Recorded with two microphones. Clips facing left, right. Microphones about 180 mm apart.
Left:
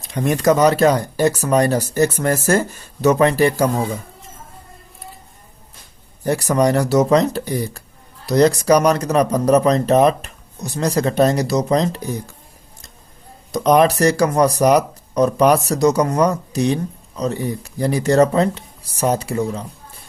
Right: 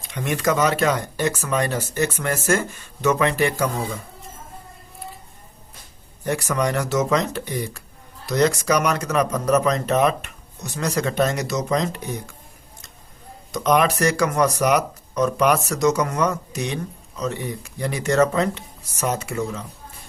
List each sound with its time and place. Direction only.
0.1 s speech: 40° left (ahead or behind)
6.2 s speech: 35° left (ahead or behind)
13.5 s speech: 35° left (ahead or behind)